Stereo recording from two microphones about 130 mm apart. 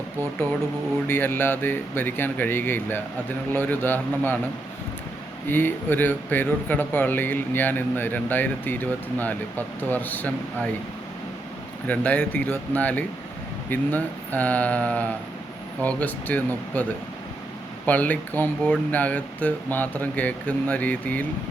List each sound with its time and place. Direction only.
1.0 s speech: 15° left (ahead or behind)
5.5 s speech: 15° left (ahead or behind)
11.9 s speech: 10° left (ahead or behind)
17.8 s speech: 15° left (ahead or behind)